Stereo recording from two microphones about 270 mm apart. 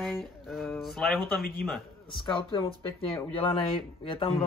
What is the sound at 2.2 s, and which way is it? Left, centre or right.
Speech, centre.